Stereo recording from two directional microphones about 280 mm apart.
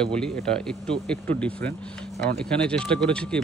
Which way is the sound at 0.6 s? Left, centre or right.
Centre.